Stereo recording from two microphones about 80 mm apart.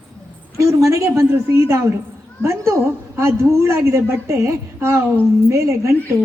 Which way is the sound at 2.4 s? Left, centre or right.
Right.